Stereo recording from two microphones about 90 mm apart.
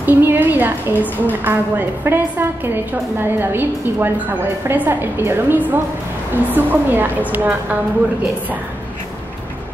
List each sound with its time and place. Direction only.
0.0 s a sound: 20° right (ahead or behind)
1.0 s a woman's voice: 20° left (ahead or behind)
1.4 s a woman's voice: 20° right (ahead or behind)